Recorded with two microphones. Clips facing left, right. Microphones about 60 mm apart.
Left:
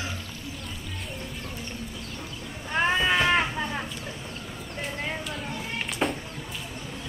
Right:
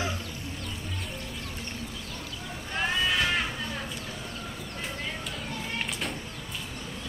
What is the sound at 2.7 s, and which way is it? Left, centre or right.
Cat, left.